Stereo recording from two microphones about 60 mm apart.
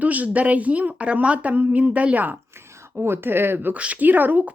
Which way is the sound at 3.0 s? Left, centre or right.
Right.